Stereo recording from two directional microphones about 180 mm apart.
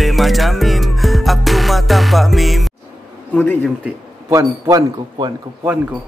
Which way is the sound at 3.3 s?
10° left (ahead or behind).